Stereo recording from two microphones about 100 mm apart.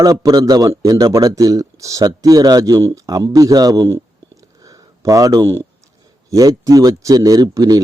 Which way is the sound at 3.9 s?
30° right (ahead or behind).